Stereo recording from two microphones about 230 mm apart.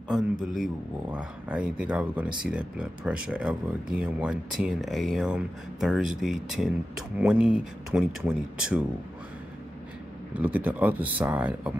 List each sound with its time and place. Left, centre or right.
0.1 s speech: centre
10.3 s speech: centre